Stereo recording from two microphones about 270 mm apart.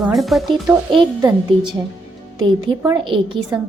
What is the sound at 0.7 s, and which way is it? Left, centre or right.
A woman's voice, centre.